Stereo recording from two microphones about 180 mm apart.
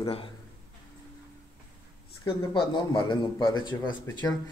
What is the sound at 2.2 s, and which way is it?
A man's voice, 25° left (ahead or behind).